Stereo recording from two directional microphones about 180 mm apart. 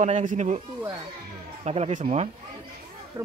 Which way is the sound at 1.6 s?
35° right (ahead or behind).